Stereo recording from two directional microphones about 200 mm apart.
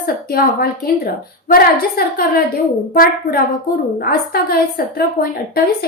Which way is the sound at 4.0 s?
50° left (ahead or behind).